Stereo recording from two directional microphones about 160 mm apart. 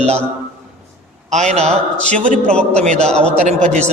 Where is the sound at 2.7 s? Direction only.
45° right (ahead or behind).